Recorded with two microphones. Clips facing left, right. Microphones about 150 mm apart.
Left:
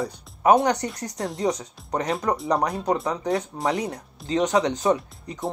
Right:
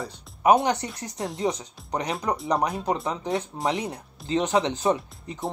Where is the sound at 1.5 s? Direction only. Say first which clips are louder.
Left 2 dB; 20° right (ahead or behind).